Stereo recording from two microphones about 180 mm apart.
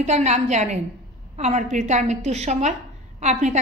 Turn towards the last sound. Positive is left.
turn(degrees=-40)  # may be behind; listen again after turning